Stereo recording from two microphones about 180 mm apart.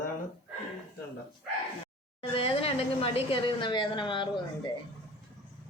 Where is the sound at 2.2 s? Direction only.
30° left (ahead or behind).